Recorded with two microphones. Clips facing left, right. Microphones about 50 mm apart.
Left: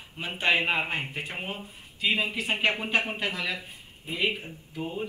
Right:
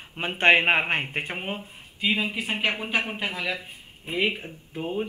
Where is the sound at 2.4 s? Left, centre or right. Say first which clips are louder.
Even; centre.